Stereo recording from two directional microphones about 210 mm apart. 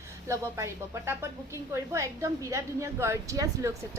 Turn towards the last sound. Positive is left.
turn(degrees=-15)  # may be behind; listen again after turning